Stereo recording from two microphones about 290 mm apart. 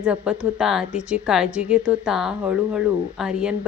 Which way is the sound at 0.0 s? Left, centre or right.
Centre.